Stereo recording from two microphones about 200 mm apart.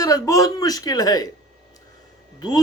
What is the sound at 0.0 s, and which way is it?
A man's voice, 15° left (ahead or behind).